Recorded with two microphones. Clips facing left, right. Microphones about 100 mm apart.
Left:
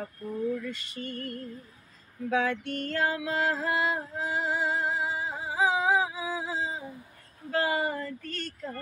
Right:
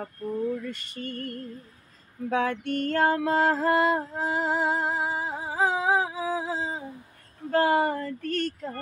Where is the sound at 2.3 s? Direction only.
55° right (ahead or behind).